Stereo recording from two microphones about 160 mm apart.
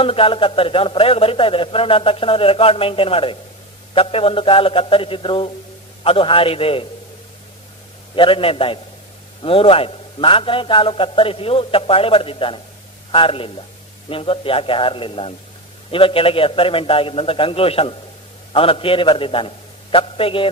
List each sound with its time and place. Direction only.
0.0 s a man's voice: 35° left (ahead or behind)
8.2 s a man's voice: 35° left (ahead or behind)